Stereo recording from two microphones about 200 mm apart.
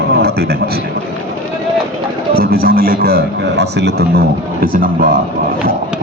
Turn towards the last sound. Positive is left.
turn(degrees=-45)  # may be behind; listen again after turning